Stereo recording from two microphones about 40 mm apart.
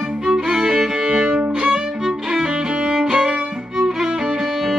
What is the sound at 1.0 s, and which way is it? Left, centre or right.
Violin, right.